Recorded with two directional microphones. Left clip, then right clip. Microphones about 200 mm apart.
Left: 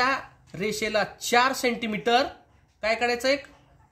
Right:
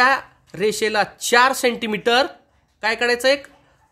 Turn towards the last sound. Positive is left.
turn(degrees=-35)  # may be behind; listen again after turning